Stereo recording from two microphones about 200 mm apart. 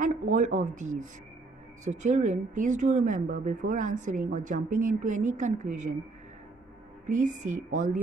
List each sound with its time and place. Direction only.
0.0 s speech: 40° right (ahead or behind)
7.1 s speech: 40° right (ahead or behind)